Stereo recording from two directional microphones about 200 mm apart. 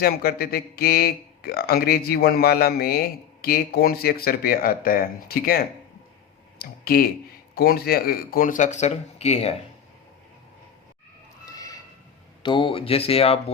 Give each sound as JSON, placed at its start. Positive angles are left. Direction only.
{"t": 0.0, "sound": "speech", "side_deg": 50}
{"t": 11.4, "sound": "a sound", "side_deg": 15}
{"t": 12.4, "sound": "speech", "side_deg": 25}